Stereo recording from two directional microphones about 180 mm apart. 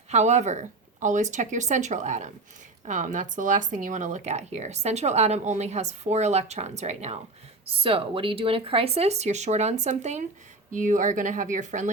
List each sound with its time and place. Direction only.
0.1 s speech: 40° right (ahead or behind)